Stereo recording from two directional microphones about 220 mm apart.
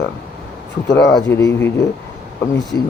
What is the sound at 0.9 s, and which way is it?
Speech, 15° left (ahead or behind).